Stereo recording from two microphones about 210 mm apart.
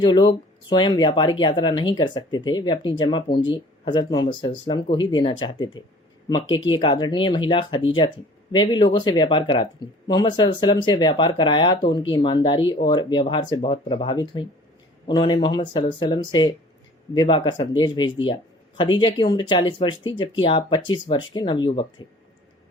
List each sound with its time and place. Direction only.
0.0 s speech: 20° left (ahead or behind)